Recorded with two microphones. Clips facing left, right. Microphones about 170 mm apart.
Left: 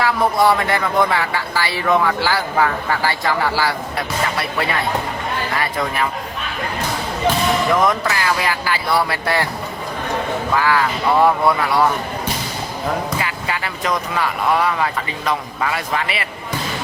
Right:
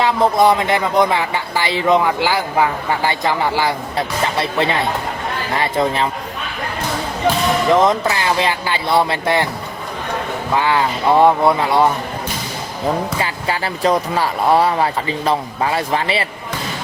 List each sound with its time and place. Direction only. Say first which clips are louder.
0.0 s speech: right 2 dB; 20° right (ahead or behind)
7.7 s speech: right 3 dB; 20° right (ahead or behind)
10.5 s speech: right 2 dB; 25° right (ahead or behind)
13.1 s speech: right 3 dB; 30° right (ahead or behind)